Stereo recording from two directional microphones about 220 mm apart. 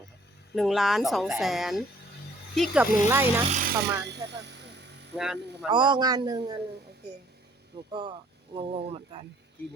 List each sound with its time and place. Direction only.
0.5 s a woman's voice: centre (ahead or behind)
3.5 s speech: 40° right (ahead or behind)
4.0 s a sound: 50° right (ahead or behind)
5.1 s a woman's voice: centre (ahead or behind)
5.6 s speech: 20° right (ahead or behind)
7.9 s speech: 20° right (ahead or behind)